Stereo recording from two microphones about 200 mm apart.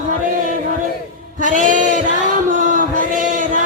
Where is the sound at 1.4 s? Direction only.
40° right (ahead or behind).